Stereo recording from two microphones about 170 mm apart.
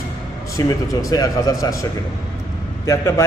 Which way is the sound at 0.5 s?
20° left (ahead or behind).